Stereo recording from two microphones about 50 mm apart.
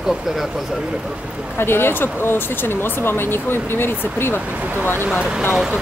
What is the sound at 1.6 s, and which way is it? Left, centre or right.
Speech, left.